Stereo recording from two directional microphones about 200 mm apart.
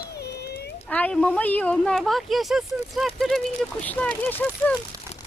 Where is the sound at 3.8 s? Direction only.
5° left (ahead or behind).